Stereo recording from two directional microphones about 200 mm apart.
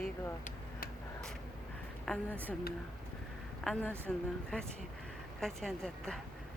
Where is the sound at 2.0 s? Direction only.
5° left (ahead or behind).